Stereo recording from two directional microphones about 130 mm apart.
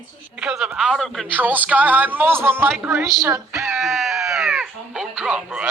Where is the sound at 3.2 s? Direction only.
25° right (ahead or behind).